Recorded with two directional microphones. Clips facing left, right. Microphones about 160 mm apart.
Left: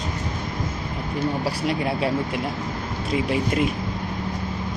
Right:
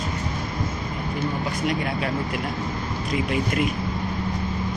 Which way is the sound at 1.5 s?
30° left (ahead or behind).